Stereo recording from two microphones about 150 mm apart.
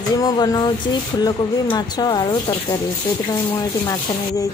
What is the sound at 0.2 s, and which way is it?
Speech, 25° left (ahead or behind).